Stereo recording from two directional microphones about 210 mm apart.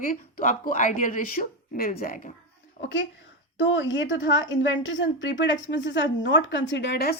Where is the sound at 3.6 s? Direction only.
65° left (ahead or behind).